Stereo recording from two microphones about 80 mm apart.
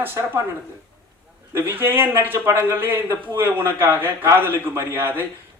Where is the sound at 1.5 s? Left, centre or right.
Right.